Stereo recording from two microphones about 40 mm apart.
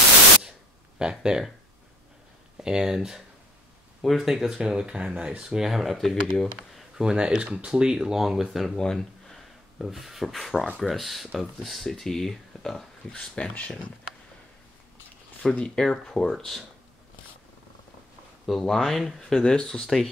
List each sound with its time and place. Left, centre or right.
0.4 s static: centre
1.2 s speech: centre
2.5 s speech: centre
4.0 s speech: centre
4.3 s speech: centre
4.6 s speech: right
5.4 s speech: centre
5.9 s speech: centre
7.0 s speech: right; by 8.7 s centre
8.7 s a sound: centre
9.8 s speech: centre
13.1 s speech: left
15.6 s speech: centre
18.6 s speech: centre